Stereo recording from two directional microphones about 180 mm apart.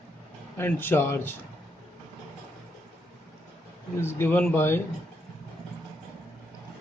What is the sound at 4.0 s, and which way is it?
Speech, 15° left (ahead or behind).